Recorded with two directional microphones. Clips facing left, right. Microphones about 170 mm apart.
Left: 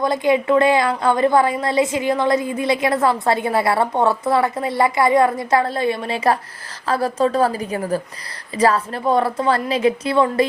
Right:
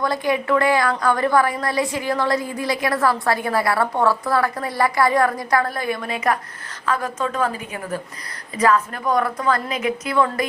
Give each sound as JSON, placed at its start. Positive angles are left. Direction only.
{"t": 0.0, "sound": "a woman's voice", "side_deg": 20}